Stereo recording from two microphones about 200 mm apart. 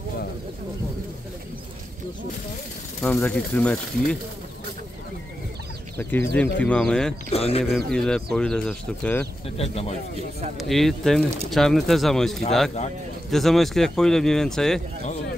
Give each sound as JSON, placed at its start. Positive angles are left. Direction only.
{"t": 3.0, "sound": "speech", "side_deg": 5}
{"t": 5.9, "sound": "speech", "side_deg": 10}
{"t": 7.3, "sound": "speech", "side_deg": 30}
{"t": 7.7, "sound": "speech", "side_deg": 5}
{"t": 9.6, "sound": "speech", "side_deg": 35}
{"t": 10.6, "sound": "speech", "side_deg": 0}